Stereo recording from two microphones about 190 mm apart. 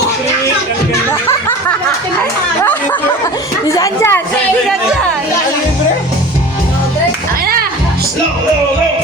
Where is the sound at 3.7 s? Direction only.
15° left (ahead or behind).